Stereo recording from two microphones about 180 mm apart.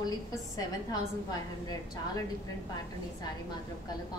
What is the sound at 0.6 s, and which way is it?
A woman's voice, 20° left (ahead or behind).